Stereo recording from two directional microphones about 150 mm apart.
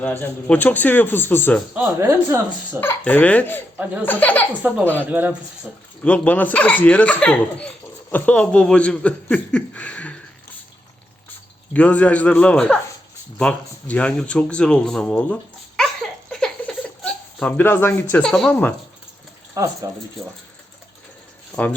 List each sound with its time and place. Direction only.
0.0 s speech: 10° left (ahead or behind)
1.7 s speech: 15° right (ahead or behind)
2.8 s speech: 10° left (ahead or behind)
4.6 s speech: 15° right (ahead or behind)
6.1 s speech: 10° left (ahead or behind)
11.7 s speech: 10° left (ahead or behind)
13.4 s a sound: 10° left (ahead or behind)
18.2 s speech: 5° left (ahead or behind)
19.5 s speech: 20° right (ahead or behind)
21.5 s speech: 10° left (ahead or behind)